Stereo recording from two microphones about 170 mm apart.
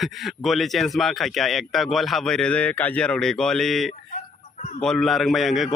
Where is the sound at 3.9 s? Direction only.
45° left (ahead or behind).